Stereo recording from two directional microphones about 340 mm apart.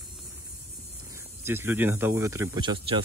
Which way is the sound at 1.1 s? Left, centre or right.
Centre.